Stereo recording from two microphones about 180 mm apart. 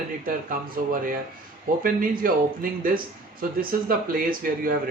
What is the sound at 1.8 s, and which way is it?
Speech, 50° right (ahead or behind).